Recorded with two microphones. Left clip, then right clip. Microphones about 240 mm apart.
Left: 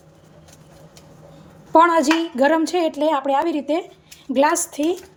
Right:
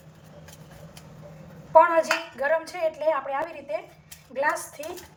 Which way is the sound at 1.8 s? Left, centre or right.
Left.